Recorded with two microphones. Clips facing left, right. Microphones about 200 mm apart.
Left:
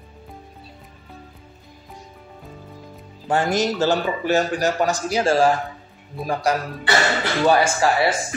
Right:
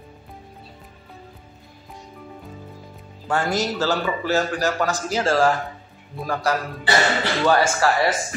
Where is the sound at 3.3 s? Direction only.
20° left (ahead or behind).